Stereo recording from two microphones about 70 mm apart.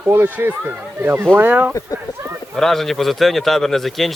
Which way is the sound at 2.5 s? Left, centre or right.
Centre.